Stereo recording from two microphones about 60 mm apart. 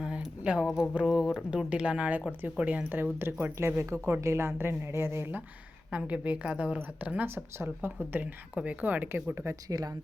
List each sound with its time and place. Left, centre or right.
0.0 s a sound: centre
1.1 s speech: centre
1.5 s speech: centre
2.9 s a woman's voice: right
5.9 s speech: right
7.3 s speech: right
9.2 s a woman's voice: right